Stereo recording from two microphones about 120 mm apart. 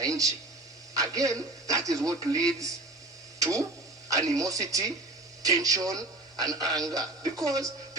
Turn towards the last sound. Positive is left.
turn(degrees=-30)  # may be behind; listen again after turning